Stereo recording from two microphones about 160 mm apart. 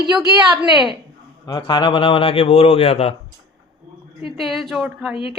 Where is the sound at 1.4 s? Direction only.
30° left (ahead or behind).